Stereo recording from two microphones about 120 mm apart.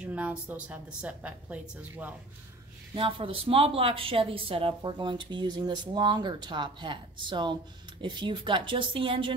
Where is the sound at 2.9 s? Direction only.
50° right (ahead or behind).